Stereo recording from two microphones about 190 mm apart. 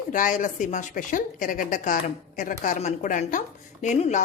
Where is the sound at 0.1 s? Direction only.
45° left (ahead or behind).